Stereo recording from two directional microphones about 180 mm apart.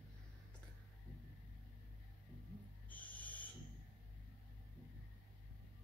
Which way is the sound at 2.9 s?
10° left (ahead or behind).